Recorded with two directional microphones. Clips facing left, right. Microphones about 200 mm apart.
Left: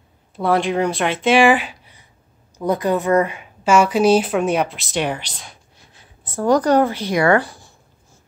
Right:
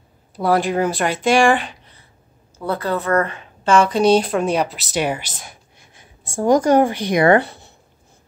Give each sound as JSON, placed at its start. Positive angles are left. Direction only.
{"t": 0.4, "sound": "a woman's voice", "side_deg": 0}